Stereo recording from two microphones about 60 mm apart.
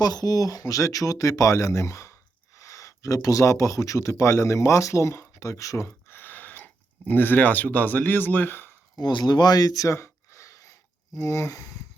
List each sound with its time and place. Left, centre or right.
0.0 s speech: left
4.1 s speech: left
6.1 s speech: left
9.5 s a sound: left
11.2 s speech: left